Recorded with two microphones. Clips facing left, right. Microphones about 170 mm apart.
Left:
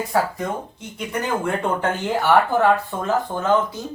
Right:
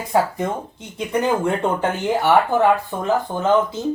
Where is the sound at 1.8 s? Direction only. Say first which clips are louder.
Right 2 dB; 15° right (ahead or behind).